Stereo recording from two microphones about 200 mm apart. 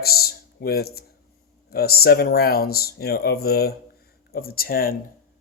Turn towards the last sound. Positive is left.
turn(degrees=45)  # may be behind; listen again after turning